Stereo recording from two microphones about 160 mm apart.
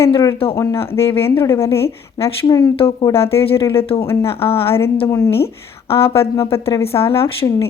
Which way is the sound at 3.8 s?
35° left (ahead or behind).